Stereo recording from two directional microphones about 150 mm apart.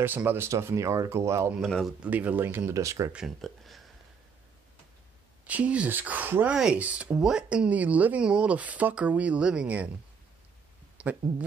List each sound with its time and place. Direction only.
0.0 s speech: 15° right (ahead or behind)
1.7 s speech: centre (ahead or behind)
2.0 s speech: 10° right (ahead or behind)
3.1 s speech: 5° right (ahead or behind)
5.4 s speech: 10° right (ahead or behind)
11.0 s speech: 10° right (ahead or behind)